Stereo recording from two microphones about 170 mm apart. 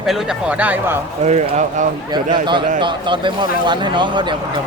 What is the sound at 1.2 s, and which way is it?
Speech, 45° right (ahead or behind).